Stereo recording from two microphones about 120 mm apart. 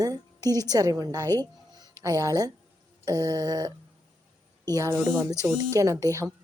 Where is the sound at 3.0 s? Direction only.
30° right (ahead or behind).